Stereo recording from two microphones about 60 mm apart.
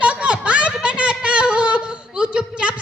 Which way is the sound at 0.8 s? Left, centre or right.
Centre.